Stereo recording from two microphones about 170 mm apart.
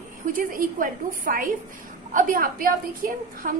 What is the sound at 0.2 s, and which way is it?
A woman's voice, 55° right (ahead or behind).